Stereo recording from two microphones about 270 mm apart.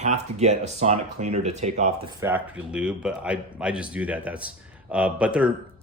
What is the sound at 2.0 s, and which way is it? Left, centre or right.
Speech, centre.